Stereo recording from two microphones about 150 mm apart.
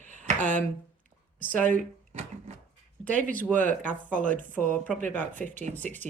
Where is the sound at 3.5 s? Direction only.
60° right (ahead or behind).